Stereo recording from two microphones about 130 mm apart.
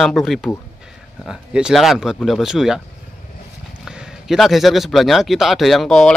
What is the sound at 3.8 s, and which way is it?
A man's voice, centre (ahead or behind).